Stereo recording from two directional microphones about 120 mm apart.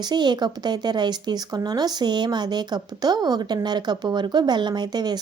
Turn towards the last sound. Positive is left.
turn(degrees=-35)  # may be behind; listen again after turning